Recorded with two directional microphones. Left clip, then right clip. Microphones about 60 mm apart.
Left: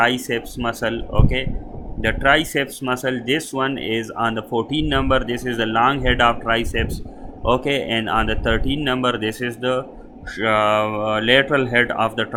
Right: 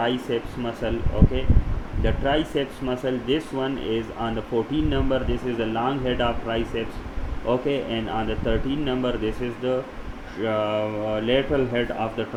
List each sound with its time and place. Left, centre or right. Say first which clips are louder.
0.0 s speech: left 6 dB; left